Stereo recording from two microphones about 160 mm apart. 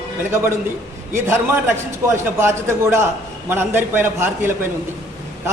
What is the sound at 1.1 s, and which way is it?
A man's voice, 15° right (ahead or behind).